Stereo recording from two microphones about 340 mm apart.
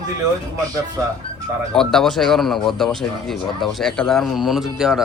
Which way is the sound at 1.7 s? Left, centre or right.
Centre.